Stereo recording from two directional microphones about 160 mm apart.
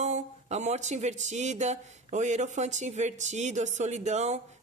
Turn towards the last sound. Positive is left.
turn(degrees=-45)  # may be behind; listen again after turning